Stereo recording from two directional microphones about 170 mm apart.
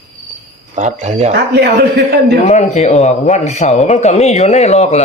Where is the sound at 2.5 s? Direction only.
40° left (ahead or behind).